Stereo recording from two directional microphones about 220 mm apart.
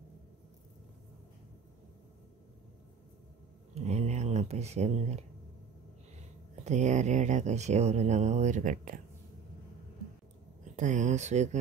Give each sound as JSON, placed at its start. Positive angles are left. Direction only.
{"t": 3.7, "sound": "a sound", "side_deg": -30}
{"t": 6.6, "sound": "speech", "side_deg": -30}
{"t": 10.6, "sound": "speech", "side_deg": -35}